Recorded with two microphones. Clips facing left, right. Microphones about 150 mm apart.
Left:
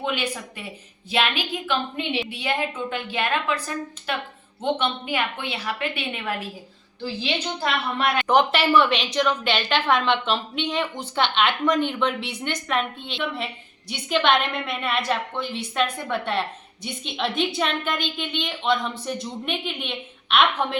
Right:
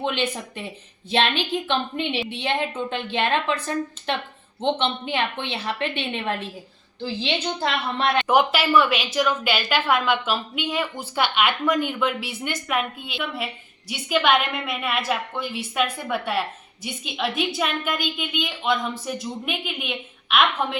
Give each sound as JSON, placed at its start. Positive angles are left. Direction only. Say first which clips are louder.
{"t": 0.0, "sound": "a woman's voice", "louder": "right 2 dB", "side_deg": -25}
{"t": 8.3, "sound": "a woman's voice", "louder": "left 1 dB", "side_deg": -5}